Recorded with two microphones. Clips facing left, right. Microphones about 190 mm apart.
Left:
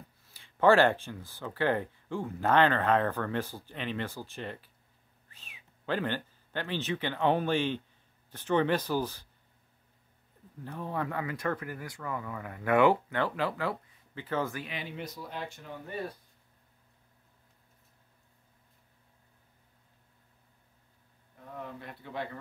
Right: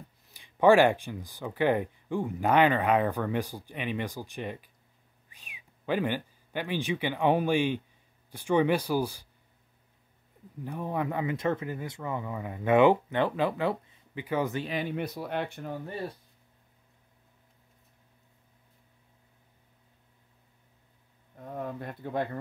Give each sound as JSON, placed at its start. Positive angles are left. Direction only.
{"t": 0.3, "sound": "speech", "side_deg": -15}
{"t": 10.6, "sound": "speech", "side_deg": -15}
{"t": 14.7, "sound": "speech", "side_deg": -55}
{"t": 21.4, "sound": "speech", "side_deg": -45}